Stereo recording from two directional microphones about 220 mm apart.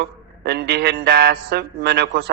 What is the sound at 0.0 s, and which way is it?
Speech, 50° right (ahead or behind).